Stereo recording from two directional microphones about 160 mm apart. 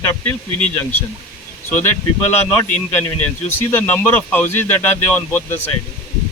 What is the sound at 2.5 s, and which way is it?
Speech, 15° left (ahead or behind).